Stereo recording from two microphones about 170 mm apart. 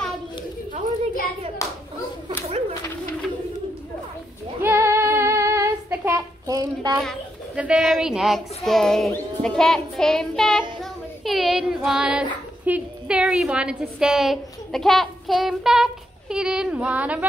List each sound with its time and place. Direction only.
1.6 s hands: 20° left (ahead or behind)
4.6 s child singing: 15° right (ahead or behind)
7.0 s speech: 5° right (ahead or behind)
9.1 s child singing: 5° left (ahead or behind)